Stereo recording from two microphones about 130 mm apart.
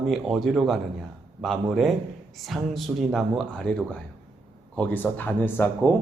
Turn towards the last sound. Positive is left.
turn(degrees=15)  # may be behind; listen again after turning